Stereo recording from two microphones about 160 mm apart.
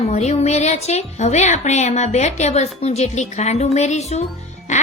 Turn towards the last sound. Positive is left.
turn(degrees=45)  # may be behind; listen again after turning